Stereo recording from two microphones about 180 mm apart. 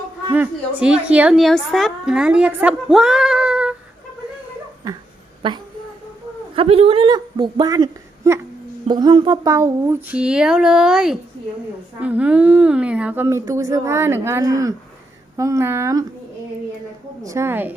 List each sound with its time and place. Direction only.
0.3 s a woman's voice: 10° right (ahead or behind)
6.6 s a woman's voice: 30° right (ahead or behind); by 16.0 s 15° right (ahead or behind)
17.2 s a woman's voice: 15° right (ahead or behind)